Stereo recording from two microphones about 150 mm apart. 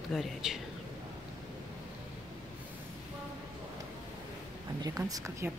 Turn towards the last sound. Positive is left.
turn(degrees=-20)  # may be behind; listen again after turning